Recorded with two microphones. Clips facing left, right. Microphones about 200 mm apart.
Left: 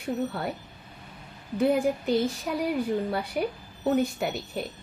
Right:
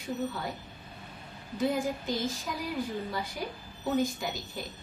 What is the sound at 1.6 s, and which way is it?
A woman's voice, 65° left (ahead or behind).